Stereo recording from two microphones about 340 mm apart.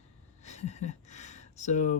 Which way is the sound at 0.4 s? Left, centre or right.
Centre.